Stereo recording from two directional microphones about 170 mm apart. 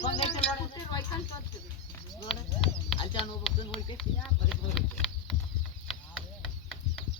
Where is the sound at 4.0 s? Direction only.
Centre (ahead or behind).